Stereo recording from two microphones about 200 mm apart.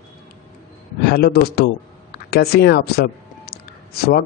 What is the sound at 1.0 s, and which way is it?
A man's voice, 50° left (ahead or behind).